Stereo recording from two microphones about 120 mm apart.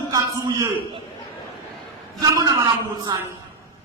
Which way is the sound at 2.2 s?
30° right (ahead or behind).